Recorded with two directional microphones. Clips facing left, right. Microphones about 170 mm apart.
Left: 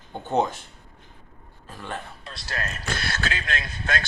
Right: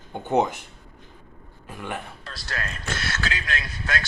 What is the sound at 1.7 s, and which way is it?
Speech, 15° right (ahead or behind).